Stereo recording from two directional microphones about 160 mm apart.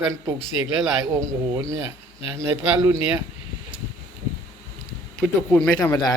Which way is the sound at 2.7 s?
10° right (ahead or behind).